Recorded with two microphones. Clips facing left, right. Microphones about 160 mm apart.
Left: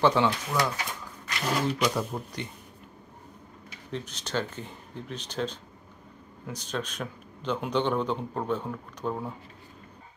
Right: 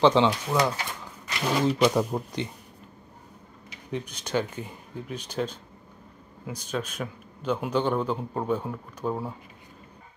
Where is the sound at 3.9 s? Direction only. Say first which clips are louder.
Right 3 dB; 10° right (ahead or behind).